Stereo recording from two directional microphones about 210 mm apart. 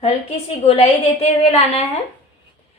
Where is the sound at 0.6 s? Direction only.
30° left (ahead or behind).